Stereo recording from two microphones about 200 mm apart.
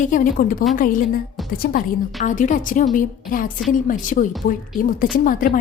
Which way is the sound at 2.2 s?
40° left (ahead or behind).